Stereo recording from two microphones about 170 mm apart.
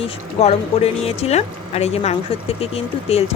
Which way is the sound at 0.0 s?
40° left (ahead or behind).